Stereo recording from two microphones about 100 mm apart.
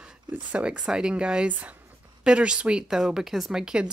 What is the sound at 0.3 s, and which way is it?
A woman's voice, 15° right (ahead or behind).